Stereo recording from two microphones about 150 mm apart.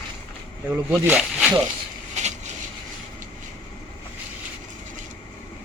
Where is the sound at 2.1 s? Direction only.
50° right (ahead or behind).